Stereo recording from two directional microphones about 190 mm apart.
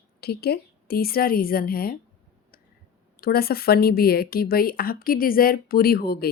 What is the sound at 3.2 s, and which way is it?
Speech, 55° left (ahead or behind).